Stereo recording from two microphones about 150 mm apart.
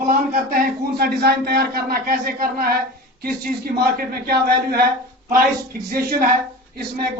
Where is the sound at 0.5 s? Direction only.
90° right.